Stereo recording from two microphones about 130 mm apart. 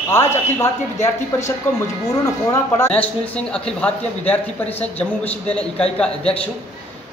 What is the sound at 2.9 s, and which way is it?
Speech, 10° left (ahead or behind).